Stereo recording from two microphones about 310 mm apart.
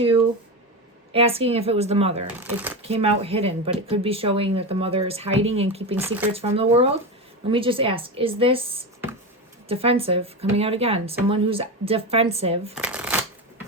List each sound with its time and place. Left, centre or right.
0.0 s a sound: centre
1.1 s speech: centre
2.4 s speech: centre
2.8 s a woman's voice: centre
9.6 s speech: centre
12.7 s shuffling cards: centre